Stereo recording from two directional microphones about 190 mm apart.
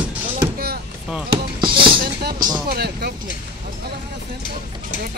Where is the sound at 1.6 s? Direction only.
25° right (ahead or behind).